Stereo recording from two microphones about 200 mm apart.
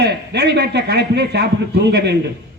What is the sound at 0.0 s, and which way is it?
A man's voice, 55° right (ahead or behind).